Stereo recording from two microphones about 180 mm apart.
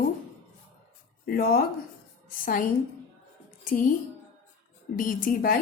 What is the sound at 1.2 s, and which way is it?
A woman's voice, 55° left (ahead or behind).